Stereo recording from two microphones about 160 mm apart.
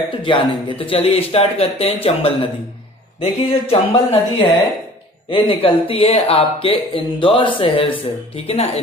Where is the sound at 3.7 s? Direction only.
30° left (ahead or behind).